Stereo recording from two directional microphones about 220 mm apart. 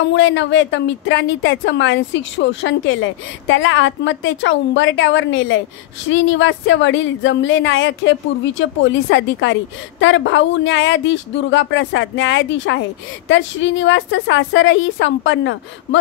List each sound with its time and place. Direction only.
0.0 s a woman's voice: 55° left (ahead or behind)